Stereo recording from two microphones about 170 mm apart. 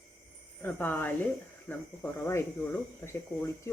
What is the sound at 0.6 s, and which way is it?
Speech, 10° left (ahead or behind).